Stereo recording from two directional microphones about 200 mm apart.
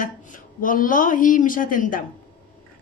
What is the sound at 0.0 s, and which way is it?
A woman's voice, 40° left (ahead or behind).